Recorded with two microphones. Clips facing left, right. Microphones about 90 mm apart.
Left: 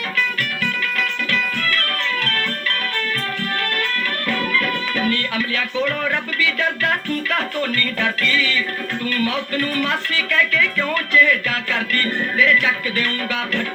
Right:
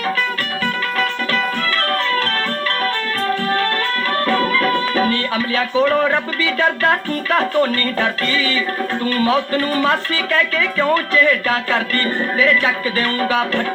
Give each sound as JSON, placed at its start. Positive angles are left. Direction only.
{"t": 0.6, "sound": "music", "side_deg": -35}
{"t": 4.3, "sound": "speech", "side_deg": -35}